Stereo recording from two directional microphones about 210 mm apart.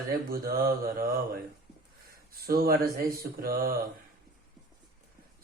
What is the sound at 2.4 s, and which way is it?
Speech, 45° right (ahead or behind).